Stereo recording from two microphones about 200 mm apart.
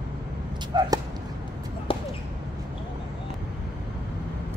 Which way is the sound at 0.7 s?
20° right (ahead or behind).